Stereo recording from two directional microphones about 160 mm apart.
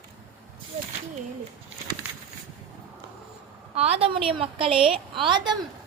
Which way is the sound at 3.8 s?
40° right (ahead or behind).